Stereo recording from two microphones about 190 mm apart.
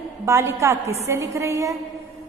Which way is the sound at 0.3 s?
15° right (ahead or behind).